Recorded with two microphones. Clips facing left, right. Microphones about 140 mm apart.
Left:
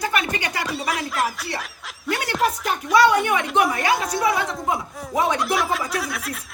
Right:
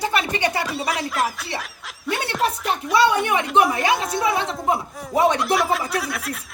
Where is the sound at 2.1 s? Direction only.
25° right (ahead or behind).